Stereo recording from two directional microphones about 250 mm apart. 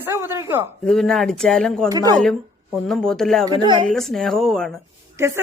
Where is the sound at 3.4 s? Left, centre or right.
Centre.